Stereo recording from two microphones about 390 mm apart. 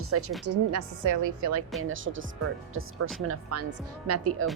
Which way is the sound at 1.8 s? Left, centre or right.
Right.